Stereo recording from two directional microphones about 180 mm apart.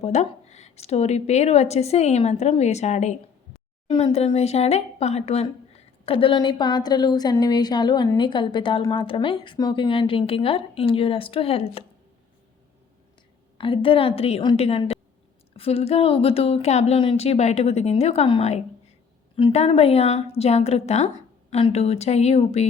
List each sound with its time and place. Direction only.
0.0 s a woman's voice: 40° left (ahead or behind)
13.6 s a woman's voice: 30° left (ahead or behind)